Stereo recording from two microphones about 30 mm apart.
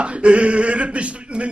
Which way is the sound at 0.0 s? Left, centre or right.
Right.